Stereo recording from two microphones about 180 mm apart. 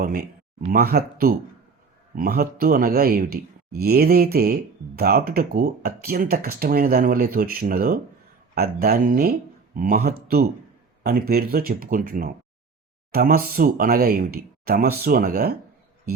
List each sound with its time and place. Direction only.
0.0 s speech: 50° right (ahead or behind)